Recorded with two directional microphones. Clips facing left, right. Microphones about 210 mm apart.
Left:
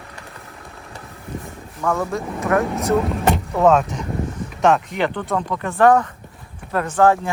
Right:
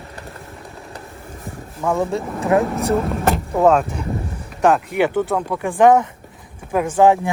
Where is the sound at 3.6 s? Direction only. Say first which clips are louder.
Even; centre (ahead or behind).